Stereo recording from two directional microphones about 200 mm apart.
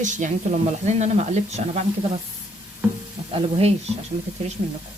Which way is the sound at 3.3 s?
30° right (ahead or behind).